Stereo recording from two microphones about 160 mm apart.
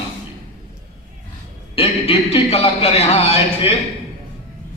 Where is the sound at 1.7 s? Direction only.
35° left (ahead or behind).